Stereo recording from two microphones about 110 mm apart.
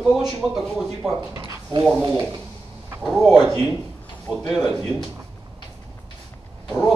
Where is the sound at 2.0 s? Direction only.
35° right (ahead or behind).